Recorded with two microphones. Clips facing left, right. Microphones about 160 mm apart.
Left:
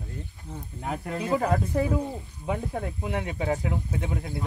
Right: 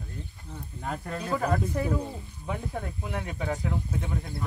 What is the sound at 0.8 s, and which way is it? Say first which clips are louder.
Speech: left 3 dB; 15° left (ahead or behind).